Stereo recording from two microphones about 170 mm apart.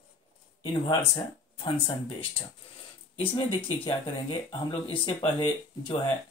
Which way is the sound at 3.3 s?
30° left (ahead or behind).